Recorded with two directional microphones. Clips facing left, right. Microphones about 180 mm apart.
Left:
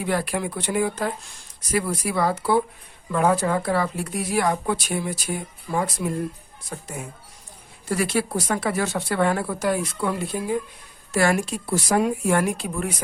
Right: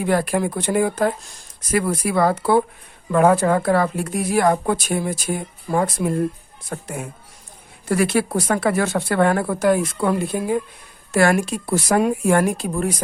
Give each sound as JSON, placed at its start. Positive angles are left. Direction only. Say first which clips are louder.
{"t": 0.0, "sound": "speech", "louder": "right 5 dB", "side_deg": -50}